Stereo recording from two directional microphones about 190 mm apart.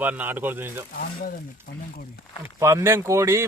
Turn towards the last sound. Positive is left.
turn(degrees=-15)  # may be behind; listen again after turning